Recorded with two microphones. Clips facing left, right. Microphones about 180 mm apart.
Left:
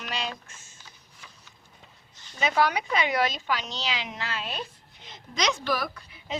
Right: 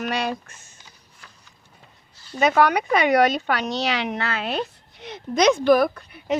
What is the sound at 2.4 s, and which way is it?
A woman's voice, 60° right (ahead or behind).